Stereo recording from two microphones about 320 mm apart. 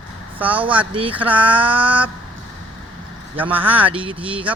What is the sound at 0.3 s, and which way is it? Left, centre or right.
Speech, centre.